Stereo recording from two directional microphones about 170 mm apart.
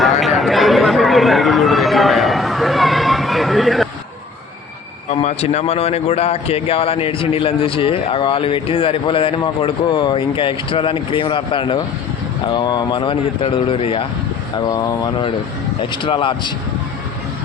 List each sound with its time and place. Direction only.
0.0 s chatter: centre (ahead or behind)
5.0 s a man's voice: 40° left (ahead or behind)
14.7 s a man's voice: 20° left (ahead or behind)